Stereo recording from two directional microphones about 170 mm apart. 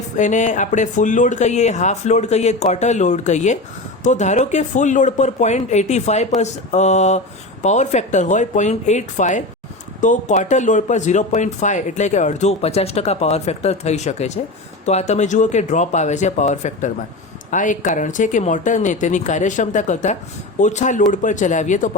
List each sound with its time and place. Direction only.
0.2 s speech: 45° left (ahead or behind)